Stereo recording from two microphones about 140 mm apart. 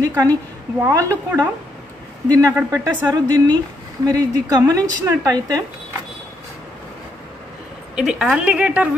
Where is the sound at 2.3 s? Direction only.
25° right (ahead or behind).